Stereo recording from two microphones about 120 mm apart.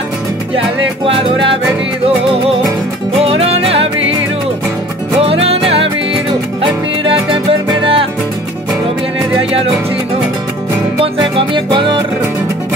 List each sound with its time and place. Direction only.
3.2 s music: 55° right (ahead or behind)
5.2 s music: 55° right (ahead or behind)
7.8 s music: 50° right (ahead or behind)
9.4 s music: 55° right (ahead or behind)
11.3 s music: 45° right (ahead or behind)